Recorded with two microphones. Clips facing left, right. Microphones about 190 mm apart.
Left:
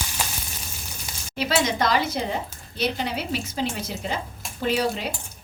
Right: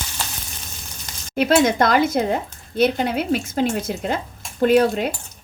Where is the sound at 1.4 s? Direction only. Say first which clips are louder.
Right 7 dB; 50° right (ahead or behind).